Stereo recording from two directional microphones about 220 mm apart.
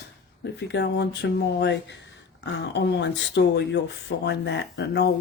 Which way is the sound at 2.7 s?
50° left (ahead or behind).